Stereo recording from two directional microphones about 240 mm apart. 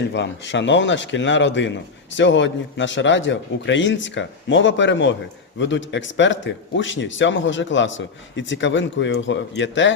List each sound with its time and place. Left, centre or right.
0.1 s speech: left